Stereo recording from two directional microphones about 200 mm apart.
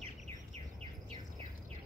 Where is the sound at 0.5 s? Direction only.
30° right (ahead or behind).